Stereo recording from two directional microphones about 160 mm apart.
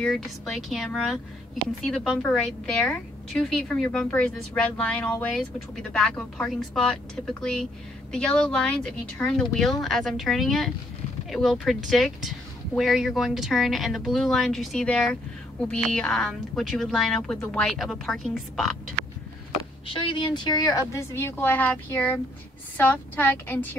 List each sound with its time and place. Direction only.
0.0 s speech: centre (ahead or behind)
19.9 s speech: 30° left (ahead or behind)
20.9 s speech: 15° left (ahead or behind)